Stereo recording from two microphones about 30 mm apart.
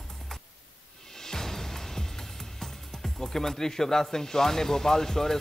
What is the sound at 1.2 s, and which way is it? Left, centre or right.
Music, centre.